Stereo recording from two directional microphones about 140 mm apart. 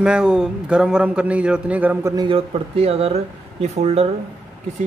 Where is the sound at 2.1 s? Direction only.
40° right (ahead or behind).